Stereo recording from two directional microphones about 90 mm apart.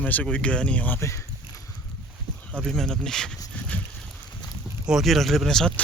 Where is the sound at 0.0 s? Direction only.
15° left (ahead or behind).